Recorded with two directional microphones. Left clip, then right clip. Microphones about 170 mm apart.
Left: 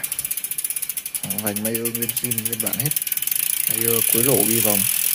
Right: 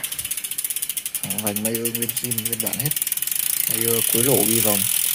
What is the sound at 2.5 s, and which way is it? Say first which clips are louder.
Speech: even; 10° left (ahead or behind).